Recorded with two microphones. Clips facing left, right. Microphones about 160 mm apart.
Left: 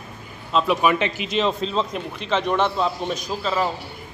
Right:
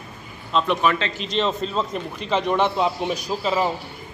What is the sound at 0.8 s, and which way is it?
Speech, 15° left (ahead or behind).